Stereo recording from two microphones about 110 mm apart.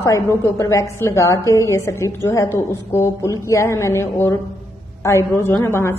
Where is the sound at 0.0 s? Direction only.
30° left (ahead or behind).